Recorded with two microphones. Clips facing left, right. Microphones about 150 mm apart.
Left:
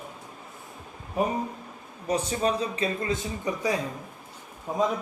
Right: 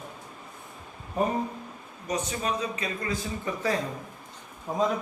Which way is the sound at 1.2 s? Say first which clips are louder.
Even; 5° left (ahead or behind).